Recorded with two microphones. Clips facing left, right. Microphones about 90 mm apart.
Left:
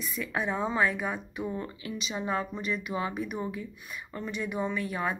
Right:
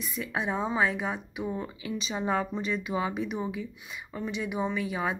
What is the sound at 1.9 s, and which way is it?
A woman's voice, 30° right (ahead or behind).